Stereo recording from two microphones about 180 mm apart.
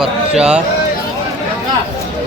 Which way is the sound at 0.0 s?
5° right (ahead or behind).